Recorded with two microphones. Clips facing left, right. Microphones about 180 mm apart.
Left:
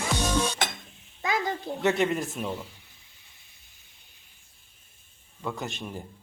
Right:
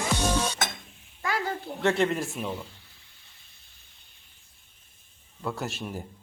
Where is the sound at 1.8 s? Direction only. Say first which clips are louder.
Even; 5° left (ahead or behind).